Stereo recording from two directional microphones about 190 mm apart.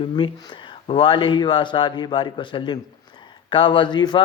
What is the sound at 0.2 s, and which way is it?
Speech, 25° left (ahead or behind).